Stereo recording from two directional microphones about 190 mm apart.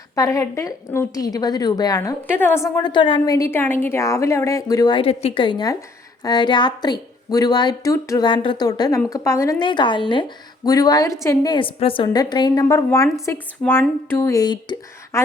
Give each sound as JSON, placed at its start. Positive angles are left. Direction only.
{"t": 0.2, "sound": "a woman's voice", "side_deg": 15}